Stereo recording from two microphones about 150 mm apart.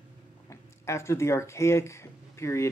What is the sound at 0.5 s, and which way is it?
Speech, 20° left (ahead or behind).